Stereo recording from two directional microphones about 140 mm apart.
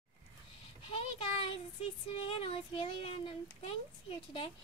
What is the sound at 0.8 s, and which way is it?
Child singing, 40° left (ahead or behind).